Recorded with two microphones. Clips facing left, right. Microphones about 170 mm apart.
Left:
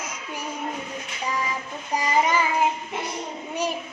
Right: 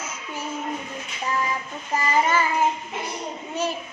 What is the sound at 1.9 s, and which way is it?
Child singing, 15° left (ahead or behind).